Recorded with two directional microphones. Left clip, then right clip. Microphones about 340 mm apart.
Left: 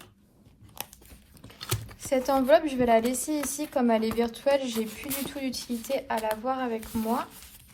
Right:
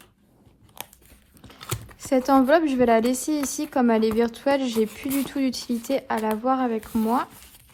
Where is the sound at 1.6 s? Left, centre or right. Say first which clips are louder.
Even; centre.